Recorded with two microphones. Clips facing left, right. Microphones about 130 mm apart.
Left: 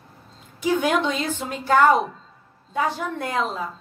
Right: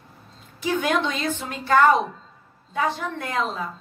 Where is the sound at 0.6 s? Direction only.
15° left (ahead or behind).